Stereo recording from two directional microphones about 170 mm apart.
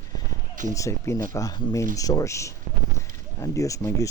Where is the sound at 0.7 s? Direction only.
20° left (ahead or behind).